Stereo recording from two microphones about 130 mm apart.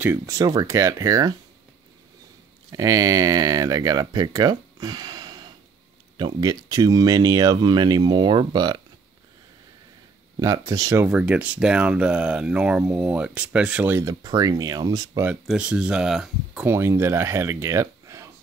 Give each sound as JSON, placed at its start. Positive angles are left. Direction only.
{"t": 0.0, "sound": "speech", "side_deg": -20}
{"t": 2.7, "sound": "speech", "side_deg": -25}
{"t": 10.4, "sound": "speech", "side_deg": -30}
{"t": 11.0, "sound": "speech", "side_deg": -10}
{"t": 14.0, "sound": "speech", "side_deg": -30}
{"t": 15.4, "sound": "speech", "side_deg": -5}
{"t": 16.6, "sound": "speech", "side_deg": -20}